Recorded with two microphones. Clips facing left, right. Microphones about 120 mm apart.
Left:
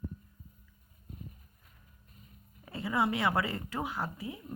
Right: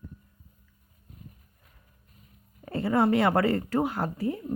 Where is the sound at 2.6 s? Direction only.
55° right (ahead or behind).